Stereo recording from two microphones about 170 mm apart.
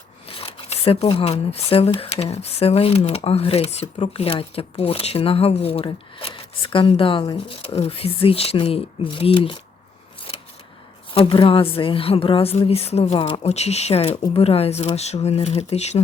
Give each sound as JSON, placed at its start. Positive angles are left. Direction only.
{"t": 0.3, "sound": "speech", "side_deg": 35}
{"t": 11.1, "sound": "speech", "side_deg": 30}